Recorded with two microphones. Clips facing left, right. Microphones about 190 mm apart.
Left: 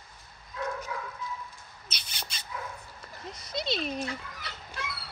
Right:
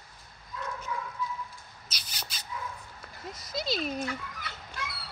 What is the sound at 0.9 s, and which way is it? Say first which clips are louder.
Dog: right 1 dB; 60° left (ahead or behind).